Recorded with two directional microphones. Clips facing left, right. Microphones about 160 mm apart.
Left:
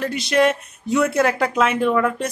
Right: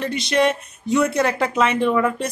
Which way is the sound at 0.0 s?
5° left (ahead or behind).